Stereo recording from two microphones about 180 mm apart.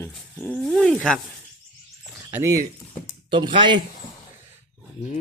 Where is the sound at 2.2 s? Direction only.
15° right (ahead or behind).